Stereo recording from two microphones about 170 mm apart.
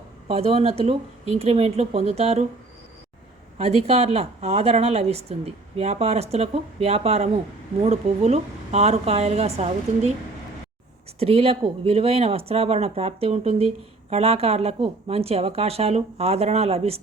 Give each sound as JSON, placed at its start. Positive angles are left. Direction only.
{"t": 0.3, "sound": "speech", "side_deg": -35}
{"t": 3.6, "sound": "speech", "side_deg": -40}
{"t": 11.2, "sound": "speech", "side_deg": -35}